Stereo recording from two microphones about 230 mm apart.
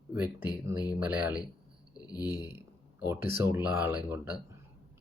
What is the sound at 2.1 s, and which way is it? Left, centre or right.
Speech, centre.